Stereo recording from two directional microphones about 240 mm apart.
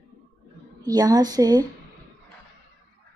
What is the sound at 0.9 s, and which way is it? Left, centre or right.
Speech, centre.